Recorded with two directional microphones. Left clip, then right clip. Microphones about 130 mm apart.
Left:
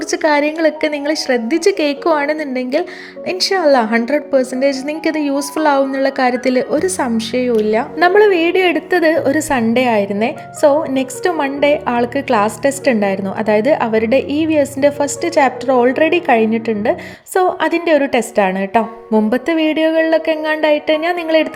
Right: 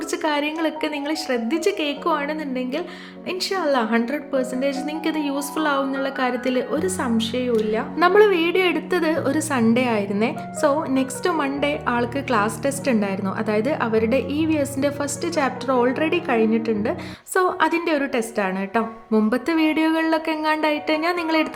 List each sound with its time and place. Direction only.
0.1 s a woman's voice: 40° left (ahead or behind)
7.9 s a woman's voice: 20° left (ahead or behind)